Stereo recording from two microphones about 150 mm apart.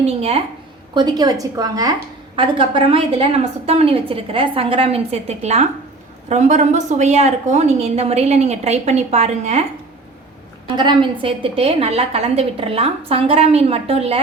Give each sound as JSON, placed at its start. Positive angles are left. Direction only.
{"t": 0.0, "sound": "a woman's voice", "side_deg": -40}
{"t": 0.9, "sound": "a woman's voice", "side_deg": -30}
{"t": 10.8, "sound": "a woman's voice", "side_deg": -30}